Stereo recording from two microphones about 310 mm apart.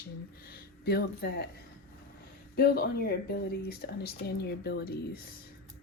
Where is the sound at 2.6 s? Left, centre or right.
Left.